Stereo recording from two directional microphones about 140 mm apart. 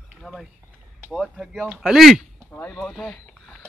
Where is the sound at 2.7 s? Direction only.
Centre (ahead or behind).